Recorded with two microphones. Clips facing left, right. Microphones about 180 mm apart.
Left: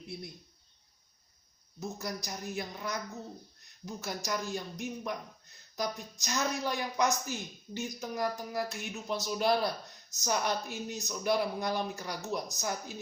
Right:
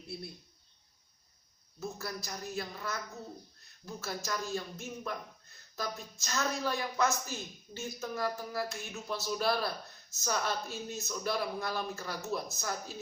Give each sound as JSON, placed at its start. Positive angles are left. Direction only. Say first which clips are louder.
{"t": 0.1, "sound": "a man's voice", "louder": "even", "side_deg": 15}
{"t": 1.8, "sound": "a man's voice", "louder": "left 2 dB", "side_deg": 20}